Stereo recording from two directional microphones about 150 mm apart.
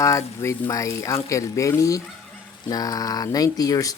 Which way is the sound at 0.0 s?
20° left (ahead or behind).